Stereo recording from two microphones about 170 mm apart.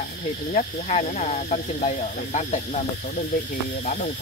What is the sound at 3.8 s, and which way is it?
Speech, 50° left (ahead or behind).